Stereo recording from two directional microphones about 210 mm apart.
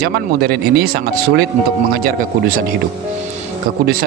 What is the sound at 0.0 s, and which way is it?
A man's voice, 50° right (ahead or behind).